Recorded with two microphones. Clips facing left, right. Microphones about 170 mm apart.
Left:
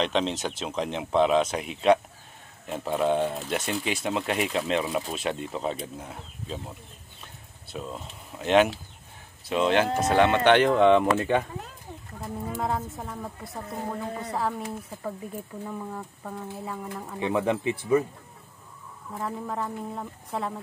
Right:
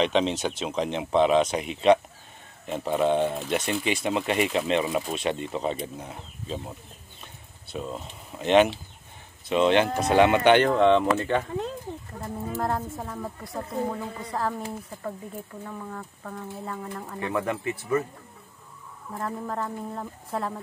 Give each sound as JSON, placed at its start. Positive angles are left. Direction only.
{"t": 0.0, "sound": "speech", "side_deg": 0}
{"t": 7.7, "sound": "speech", "side_deg": 0}
{"t": 11.1, "sound": "speech", "side_deg": 15}
{"t": 12.2, "sound": "speech", "side_deg": 0}
{"t": 15.6, "sound": "speech", "side_deg": 10}
{"t": 17.2, "sound": "speech", "side_deg": 20}
{"t": 19.1, "sound": "speech", "side_deg": 0}